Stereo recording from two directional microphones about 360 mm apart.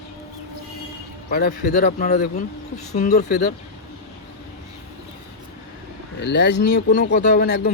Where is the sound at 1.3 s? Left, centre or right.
Left.